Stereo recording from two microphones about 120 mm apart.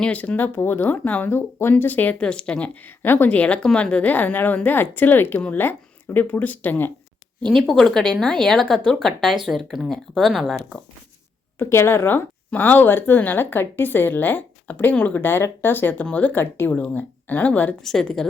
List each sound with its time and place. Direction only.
0.0 s speech: 10° left (ahead or behind)
7.4 s speech: 5° left (ahead or behind)
11.6 s speech: 20° left (ahead or behind); by 18.3 s 5° left (ahead or behind)